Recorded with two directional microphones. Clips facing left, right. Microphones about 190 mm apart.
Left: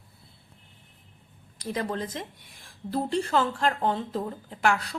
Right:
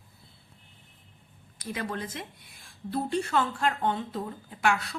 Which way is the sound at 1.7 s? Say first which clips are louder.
Left 3 dB; 35° left (ahead or behind).